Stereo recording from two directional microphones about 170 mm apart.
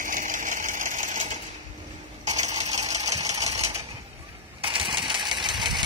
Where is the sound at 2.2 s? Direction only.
40° right (ahead or behind).